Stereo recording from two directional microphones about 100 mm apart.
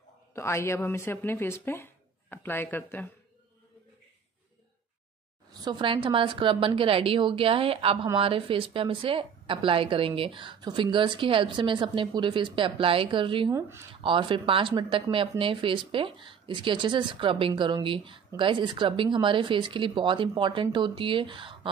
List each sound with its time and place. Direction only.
0.3 s speech: 25° left (ahead or behind)
5.5 s speech: 45° right (ahead or behind)
13.5 s speech: 30° right (ahead or behind)
14.0 s speech: 55° right (ahead or behind)